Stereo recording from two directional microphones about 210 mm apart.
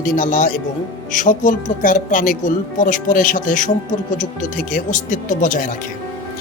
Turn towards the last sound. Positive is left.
turn(degrees=35)  # may be behind; listen again after turning